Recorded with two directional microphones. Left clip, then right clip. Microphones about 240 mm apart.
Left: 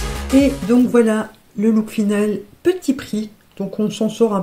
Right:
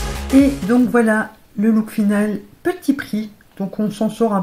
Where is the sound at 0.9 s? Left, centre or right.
Left.